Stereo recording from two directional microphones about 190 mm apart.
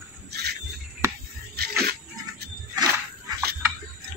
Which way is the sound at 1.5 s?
55° right (ahead or behind).